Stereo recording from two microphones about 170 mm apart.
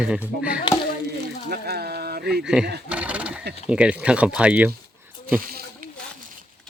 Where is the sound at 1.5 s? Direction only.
65° right (ahead or behind).